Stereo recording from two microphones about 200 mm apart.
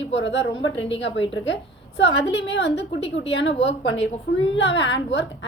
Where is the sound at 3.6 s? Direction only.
65° left (ahead or behind).